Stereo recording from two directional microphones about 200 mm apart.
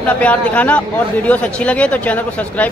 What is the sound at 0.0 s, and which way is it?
Speech, 5° left (ahead or behind).